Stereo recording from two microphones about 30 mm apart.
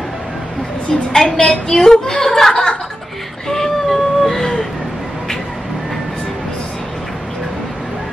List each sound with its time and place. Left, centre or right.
1.1 s speech: centre
2.5 s chuckle: left
3.4 s a sound: centre